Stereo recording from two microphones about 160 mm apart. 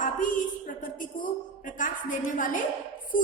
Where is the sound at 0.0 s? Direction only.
55° left (ahead or behind).